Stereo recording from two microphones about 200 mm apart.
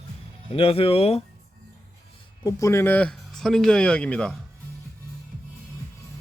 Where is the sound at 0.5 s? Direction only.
30° left (ahead or behind).